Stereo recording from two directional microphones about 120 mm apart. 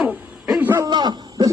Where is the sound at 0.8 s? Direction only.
35° right (ahead or behind).